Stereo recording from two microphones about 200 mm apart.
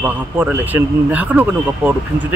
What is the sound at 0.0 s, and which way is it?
Speech, 10° right (ahead or behind).